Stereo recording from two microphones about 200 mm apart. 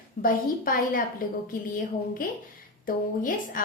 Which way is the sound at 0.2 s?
45° left (ahead or behind).